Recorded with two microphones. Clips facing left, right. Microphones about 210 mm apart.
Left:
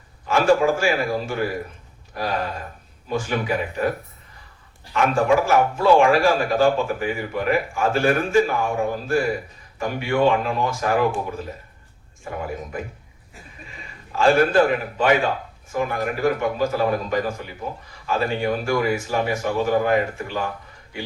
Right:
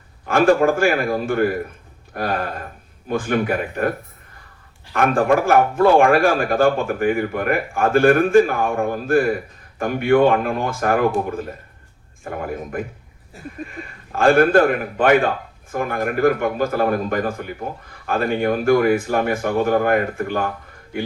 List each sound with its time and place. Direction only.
0.3 s a man's voice: 55° right (ahead or behind)
4.9 s a man's voice: 55° right (ahead or behind)
12.2 s a man's voice: 55° right (ahead or behind)